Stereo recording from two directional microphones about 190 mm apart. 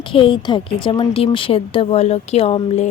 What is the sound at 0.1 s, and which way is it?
A woman's voice, 25° left (ahead or behind).